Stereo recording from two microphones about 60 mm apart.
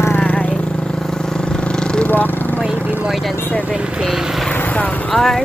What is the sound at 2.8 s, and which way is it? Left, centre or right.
Vehicle, right.